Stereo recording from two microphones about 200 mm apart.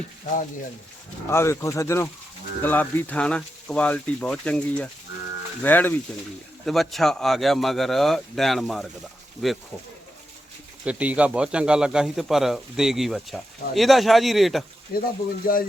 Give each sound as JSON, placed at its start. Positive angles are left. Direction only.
{"t": 1.3, "sound": "speech", "side_deg": 15}
{"t": 10.8, "sound": "speech", "side_deg": -5}
{"t": 14.9, "sound": "speech", "side_deg": 45}